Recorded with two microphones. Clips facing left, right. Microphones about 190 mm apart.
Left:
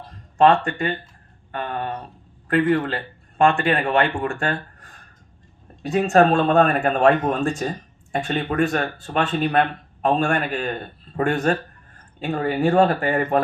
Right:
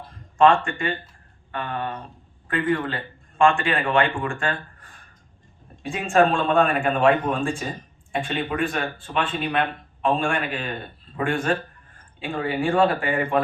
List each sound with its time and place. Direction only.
0.3 s speech: 35° left (ahead or behind)
5.8 s speech: 40° left (ahead or behind)